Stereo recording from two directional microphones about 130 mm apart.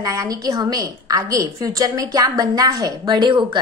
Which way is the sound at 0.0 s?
25° right (ahead or behind).